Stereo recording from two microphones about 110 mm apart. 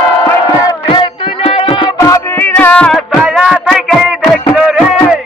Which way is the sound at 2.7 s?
5° left (ahead or behind).